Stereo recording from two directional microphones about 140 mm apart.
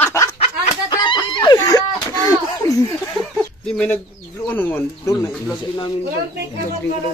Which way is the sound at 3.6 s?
5° left (ahead or behind).